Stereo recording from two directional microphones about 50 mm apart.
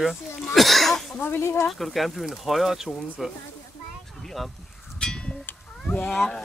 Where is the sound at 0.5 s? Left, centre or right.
Centre.